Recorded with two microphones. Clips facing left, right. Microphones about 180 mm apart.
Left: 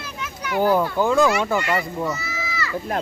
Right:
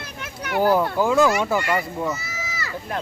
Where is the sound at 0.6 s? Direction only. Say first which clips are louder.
Even; 5° right (ahead or behind).